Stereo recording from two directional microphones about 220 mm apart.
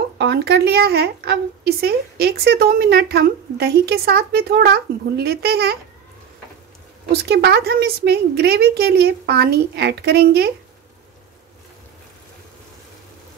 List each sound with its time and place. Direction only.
0.2 s a woman's voice: 50° right (ahead or behind)
7.1 s a woman's voice: 45° right (ahead or behind)